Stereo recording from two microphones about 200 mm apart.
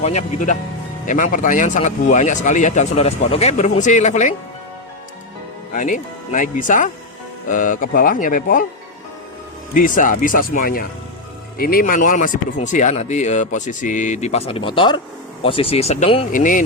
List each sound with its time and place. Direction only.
0.0 s speech: 35° left (ahead or behind)
5.7 s speech: 40° left (ahead or behind)
9.7 s speech: 40° left (ahead or behind)
16.3 s speech: 40° left (ahead or behind)